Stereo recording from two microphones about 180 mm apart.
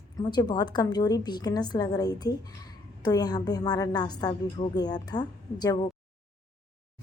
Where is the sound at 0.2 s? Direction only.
25° left (ahead or behind).